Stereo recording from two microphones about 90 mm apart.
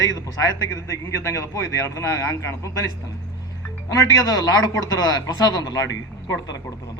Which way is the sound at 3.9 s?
40° left (ahead or behind).